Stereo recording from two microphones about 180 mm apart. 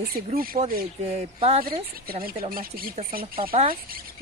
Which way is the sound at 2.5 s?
55° right (ahead or behind).